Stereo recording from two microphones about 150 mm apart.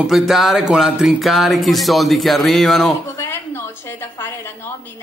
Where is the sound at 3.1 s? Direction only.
20° left (ahead or behind).